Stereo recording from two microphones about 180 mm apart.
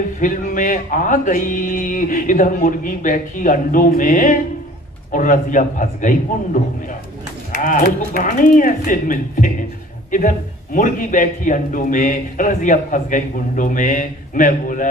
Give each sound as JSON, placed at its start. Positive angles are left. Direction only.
{"t": 0.2, "sound": "speech", "side_deg": 50}